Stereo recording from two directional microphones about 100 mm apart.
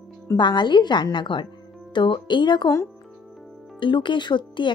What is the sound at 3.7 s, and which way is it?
Speech, 55° left (ahead or behind).